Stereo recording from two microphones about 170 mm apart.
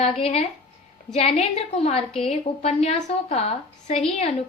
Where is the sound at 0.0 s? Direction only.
35° left (ahead or behind).